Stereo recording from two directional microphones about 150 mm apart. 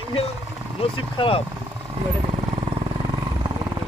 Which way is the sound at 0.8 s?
35° left (ahead or behind).